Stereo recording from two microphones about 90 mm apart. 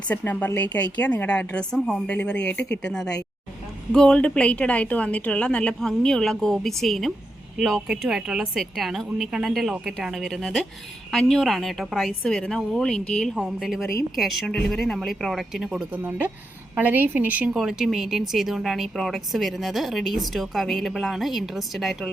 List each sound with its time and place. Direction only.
0.1 s a woman's voice: 20° left (ahead or behind); by 12.1 s 5° right (ahead or behind)
12.2 s a woman's voice: 10° left (ahead or behind)
13.3 s speech: 5° right (ahead or behind)
15.9 s a woman's voice: 20° right (ahead or behind)
17.5 s speech: 5° right (ahead or behind)